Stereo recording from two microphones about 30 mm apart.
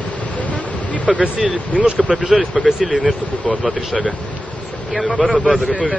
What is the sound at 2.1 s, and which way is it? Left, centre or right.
Speech, right.